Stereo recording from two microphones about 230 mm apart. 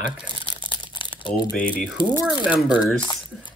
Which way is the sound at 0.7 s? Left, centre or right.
Left.